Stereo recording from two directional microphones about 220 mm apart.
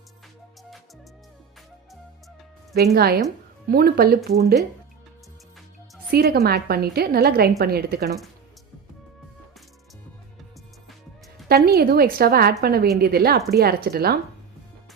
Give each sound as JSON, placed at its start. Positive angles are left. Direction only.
{"t": 2.7, "sound": "a woman's voice", "side_deg": -45}
{"t": 6.1, "sound": "a woman's voice", "side_deg": -45}
{"t": 11.4, "sound": "a woman's voice", "side_deg": -45}